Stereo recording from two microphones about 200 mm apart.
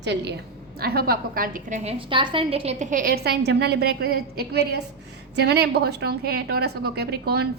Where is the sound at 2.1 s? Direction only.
25° right (ahead or behind).